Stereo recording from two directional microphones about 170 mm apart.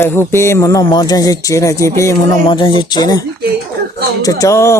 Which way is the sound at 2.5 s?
30° left (ahead or behind).